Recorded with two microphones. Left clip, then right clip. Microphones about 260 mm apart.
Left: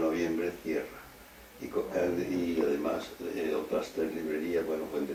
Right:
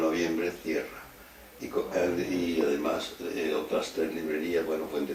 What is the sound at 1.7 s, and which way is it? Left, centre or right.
Speech, centre.